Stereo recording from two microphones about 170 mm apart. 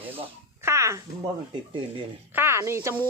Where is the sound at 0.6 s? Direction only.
15° right (ahead or behind).